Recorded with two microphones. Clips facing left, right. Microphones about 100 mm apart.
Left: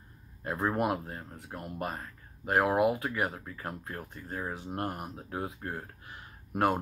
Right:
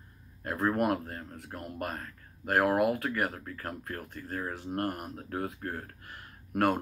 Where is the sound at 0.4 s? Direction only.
5° left (ahead or behind).